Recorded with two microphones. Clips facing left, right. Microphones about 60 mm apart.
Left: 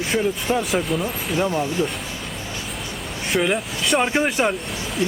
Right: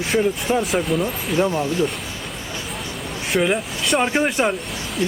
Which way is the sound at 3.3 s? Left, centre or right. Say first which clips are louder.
Right 1 dB; centre.